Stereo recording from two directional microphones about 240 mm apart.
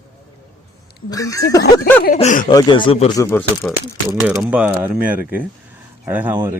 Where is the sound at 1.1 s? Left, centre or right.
Centre.